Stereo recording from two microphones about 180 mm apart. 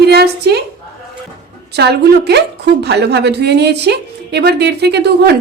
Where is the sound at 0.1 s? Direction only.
65° right (ahead or behind).